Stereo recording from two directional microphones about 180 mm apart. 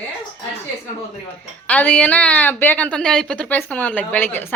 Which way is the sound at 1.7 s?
10° left (ahead or behind).